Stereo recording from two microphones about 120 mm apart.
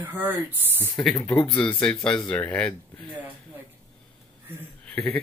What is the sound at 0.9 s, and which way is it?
Speech, 5° left (ahead or behind).